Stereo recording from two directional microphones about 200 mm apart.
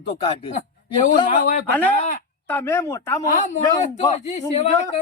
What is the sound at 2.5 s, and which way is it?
Speech, 10° left (ahead or behind).